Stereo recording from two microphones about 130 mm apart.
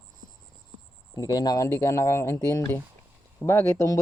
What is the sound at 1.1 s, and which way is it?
Speech, 30° left (ahead or behind).